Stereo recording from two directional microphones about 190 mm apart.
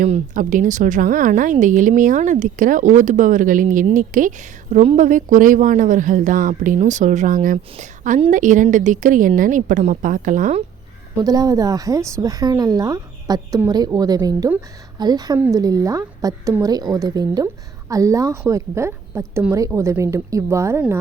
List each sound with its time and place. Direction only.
0.0 s a woman's voice: 40° right (ahead or behind)
11.2 s a woman's voice: 20° right (ahead or behind)